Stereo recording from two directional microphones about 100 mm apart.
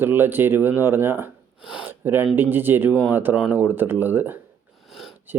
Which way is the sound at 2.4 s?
20° right (ahead or behind).